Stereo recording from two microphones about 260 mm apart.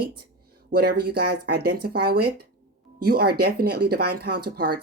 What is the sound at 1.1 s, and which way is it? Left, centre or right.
Speech, right.